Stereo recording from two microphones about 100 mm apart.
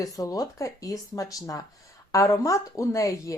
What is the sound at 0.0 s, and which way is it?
Speech, 35° left (ahead or behind).